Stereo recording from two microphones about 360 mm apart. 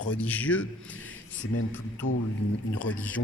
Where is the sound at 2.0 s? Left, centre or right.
Left.